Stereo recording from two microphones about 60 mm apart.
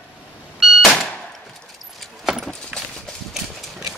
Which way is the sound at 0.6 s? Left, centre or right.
Centre.